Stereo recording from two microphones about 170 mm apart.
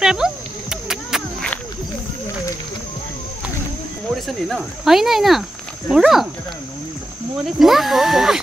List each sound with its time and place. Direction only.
0.0 s a sound: 5° right (ahead or behind)
4.1 s speech: centre (ahead or behind)
7.5 s speech: centre (ahead or behind)